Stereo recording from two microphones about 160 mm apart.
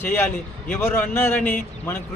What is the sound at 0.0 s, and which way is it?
Speech, 10° left (ahead or behind).